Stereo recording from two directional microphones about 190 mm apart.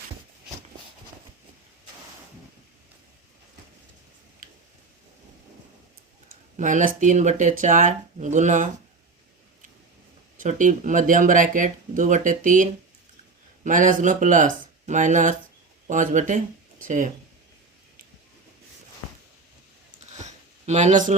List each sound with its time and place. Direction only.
6.6 s speech: 40° right (ahead or behind)
10.3 s speech: 45° right (ahead or behind)
13.7 s speech: 45° right (ahead or behind)
20.2 s a sound: 40° right (ahead or behind)